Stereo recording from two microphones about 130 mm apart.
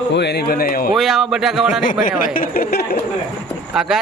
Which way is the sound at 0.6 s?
90° left.